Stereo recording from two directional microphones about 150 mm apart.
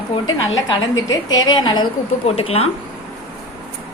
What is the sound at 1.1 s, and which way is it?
A woman's voice, 25° left (ahead or behind).